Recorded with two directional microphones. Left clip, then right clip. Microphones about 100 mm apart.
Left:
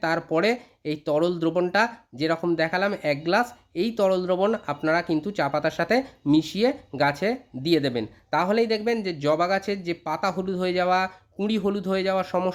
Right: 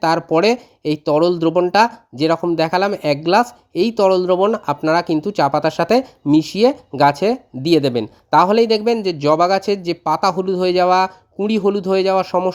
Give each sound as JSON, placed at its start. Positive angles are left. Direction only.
{"t": 0.2, "sound": "speech", "side_deg": -40}
{"t": 1.7, "sound": "speech", "side_deg": -55}
{"t": 4.5, "sound": "speech", "side_deg": -55}
{"t": 9.1, "sound": "speech", "side_deg": -40}
{"t": 10.3, "sound": "speech", "side_deg": -40}
{"t": 11.4, "sound": "speech", "side_deg": -35}